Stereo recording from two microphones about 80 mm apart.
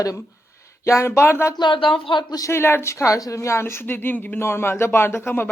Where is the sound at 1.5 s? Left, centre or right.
Left.